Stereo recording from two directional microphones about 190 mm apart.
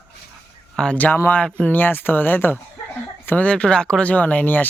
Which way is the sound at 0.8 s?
5° left (ahead or behind).